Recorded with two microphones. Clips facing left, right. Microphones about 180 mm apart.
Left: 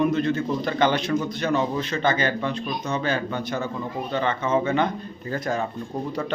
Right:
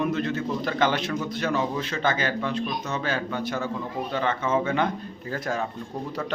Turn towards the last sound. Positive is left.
turn(degrees=-5)  # may be behind; listen again after turning